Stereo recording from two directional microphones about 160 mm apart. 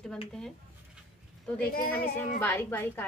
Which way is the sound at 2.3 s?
15° left (ahead or behind).